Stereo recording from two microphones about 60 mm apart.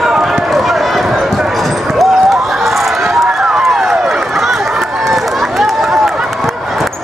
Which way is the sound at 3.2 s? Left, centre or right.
Centre.